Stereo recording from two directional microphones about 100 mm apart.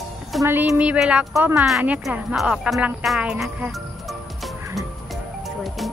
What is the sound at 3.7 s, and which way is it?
Music, centre (ahead or behind).